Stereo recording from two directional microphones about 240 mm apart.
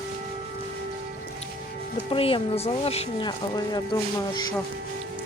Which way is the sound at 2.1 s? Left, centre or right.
Left.